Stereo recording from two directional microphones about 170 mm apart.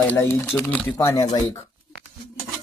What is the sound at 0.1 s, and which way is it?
Speech, 15° left (ahead or behind).